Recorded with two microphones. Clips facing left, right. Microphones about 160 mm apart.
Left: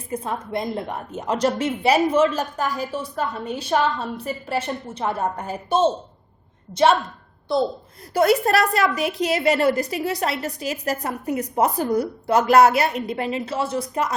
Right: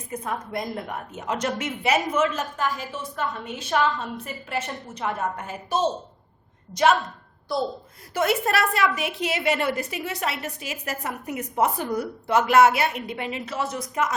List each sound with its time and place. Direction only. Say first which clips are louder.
0.1 s a woman's voice: left 4 dB; 30° left (ahead or behind)
8.1 s a woman's voice: left 5 dB; 35° left (ahead or behind)